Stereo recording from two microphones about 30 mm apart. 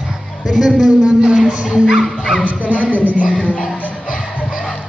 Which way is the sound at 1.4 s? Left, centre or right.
Right.